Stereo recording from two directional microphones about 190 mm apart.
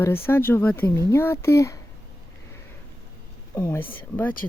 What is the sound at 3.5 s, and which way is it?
Speech, 15° left (ahead or behind).